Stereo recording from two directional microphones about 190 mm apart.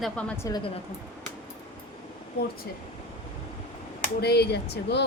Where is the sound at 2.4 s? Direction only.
60° left (ahead or behind).